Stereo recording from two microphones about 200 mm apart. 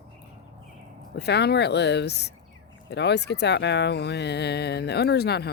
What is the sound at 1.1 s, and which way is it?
Speech, 55° left (ahead or behind).